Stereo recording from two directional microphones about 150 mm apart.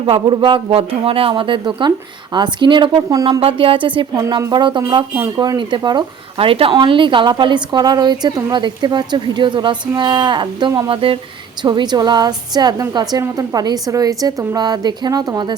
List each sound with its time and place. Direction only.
0.0 s a woman's voice: 35° right (ahead or behind)
3.4 s a woman's voice: 35° right (ahead or behind)
10.8 s a woman's voice: 35° right (ahead or behind)